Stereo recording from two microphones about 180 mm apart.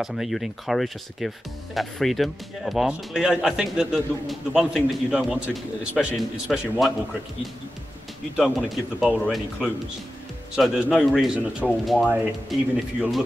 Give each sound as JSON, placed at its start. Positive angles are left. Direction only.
{"t": 0.0, "sound": "speech", "side_deg": 0}
{"t": 8.4, "sound": "speech", "side_deg": 0}